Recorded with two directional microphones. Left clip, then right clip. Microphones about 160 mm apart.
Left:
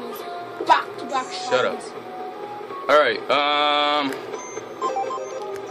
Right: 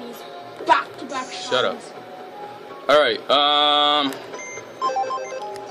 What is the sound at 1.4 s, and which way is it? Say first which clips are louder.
Speech: right 1 dB; 15° right (ahead or behind).